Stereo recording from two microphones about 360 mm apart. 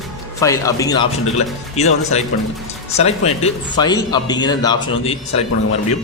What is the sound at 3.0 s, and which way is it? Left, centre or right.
Speech, centre.